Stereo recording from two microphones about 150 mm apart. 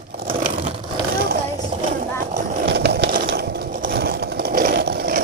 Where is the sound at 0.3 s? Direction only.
70° right (ahead or behind).